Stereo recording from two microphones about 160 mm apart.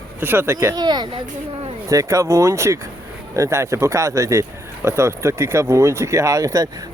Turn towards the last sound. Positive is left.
turn(degrees=-20)  # may be behind; listen again after turning